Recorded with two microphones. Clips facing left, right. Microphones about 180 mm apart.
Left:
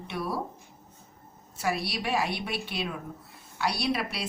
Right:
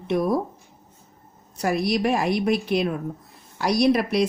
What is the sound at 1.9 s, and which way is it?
Speech, 45° right (ahead or behind).